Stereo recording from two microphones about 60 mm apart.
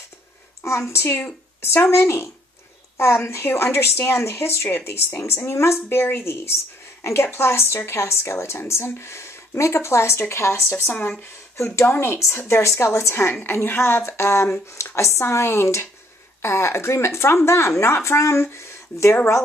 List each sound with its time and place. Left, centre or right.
0.7 s a woman's voice: left
10.9 s speech: left
11.5 s a woman's voice: left